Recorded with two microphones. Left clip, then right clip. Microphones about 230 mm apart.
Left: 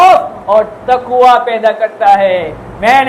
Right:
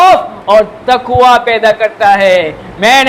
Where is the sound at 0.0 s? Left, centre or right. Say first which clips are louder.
Even; right.